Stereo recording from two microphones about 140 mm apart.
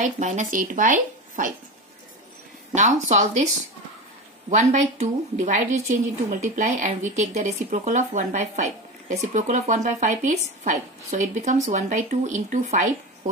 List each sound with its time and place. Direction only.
0.0 s speech: 60° right (ahead or behind)
2.7 s speech: 55° right (ahead or behind)
4.5 s speech: 55° right (ahead or behind)